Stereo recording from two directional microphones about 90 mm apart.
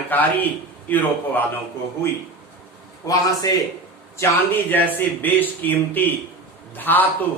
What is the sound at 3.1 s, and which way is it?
Speech, 40° left (ahead or behind).